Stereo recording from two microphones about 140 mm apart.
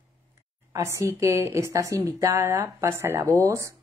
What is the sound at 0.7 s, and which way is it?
A woman's voice, 20° right (ahead or behind).